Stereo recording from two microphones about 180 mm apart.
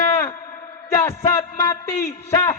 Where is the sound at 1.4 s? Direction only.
15° left (ahead or behind).